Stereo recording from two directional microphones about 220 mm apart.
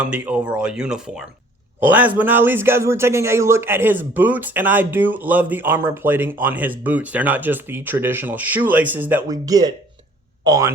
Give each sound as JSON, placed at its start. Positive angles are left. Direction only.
{"t": 0.0, "sound": "a man's voice", "side_deg": -5}